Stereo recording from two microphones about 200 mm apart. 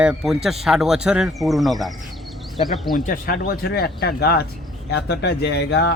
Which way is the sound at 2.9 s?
45° left (ahead or behind).